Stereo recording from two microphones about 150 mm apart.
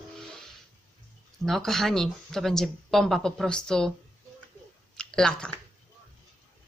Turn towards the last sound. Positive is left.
turn(degrees=5)  # may be behind; listen again after turning